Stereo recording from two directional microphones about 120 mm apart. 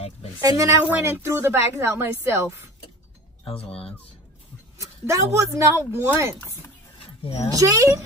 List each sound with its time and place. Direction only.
0.4 s a woman's voice: 30° right (ahead or behind)
3.4 s speech: 50° left (ahead or behind)
4.7 s a woman's voice: 25° right (ahead or behind)
7.5 s a woman's voice: 25° right (ahead or behind)